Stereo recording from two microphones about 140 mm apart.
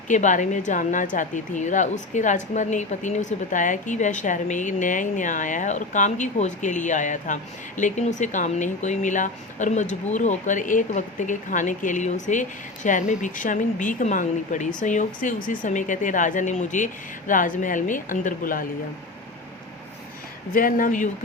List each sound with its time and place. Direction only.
0.1 s speech: 65° left (ahead or behind)
20.5 s speech: 85° left